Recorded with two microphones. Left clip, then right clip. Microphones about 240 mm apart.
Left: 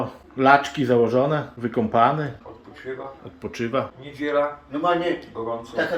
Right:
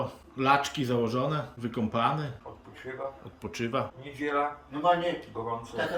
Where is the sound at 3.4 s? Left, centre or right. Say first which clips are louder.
Left 6 dB; centre.